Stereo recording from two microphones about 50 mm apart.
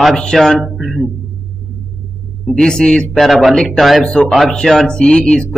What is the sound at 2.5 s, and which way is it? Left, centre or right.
Speech, centre.